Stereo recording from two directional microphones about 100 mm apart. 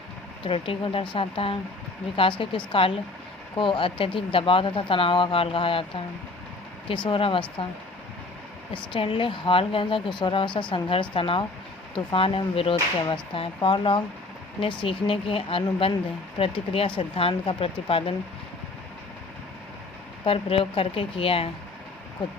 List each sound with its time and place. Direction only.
0.4 s speech: 60° left (ahead or behind)
6.8 s speech: 60° left (ahead or behind)
8.7 s speech: 60° left (ahead or behind)
20.2 s speech: 70° left (ahead or behind)
22.2 s speech: 55° left (ahead or behind)